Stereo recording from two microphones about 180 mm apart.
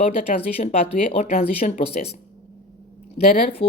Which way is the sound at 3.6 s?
30° left (ahead or behind).